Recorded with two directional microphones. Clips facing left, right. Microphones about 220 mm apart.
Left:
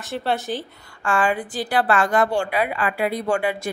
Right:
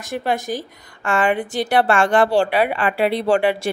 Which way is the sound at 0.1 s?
15° right (ahead or behind).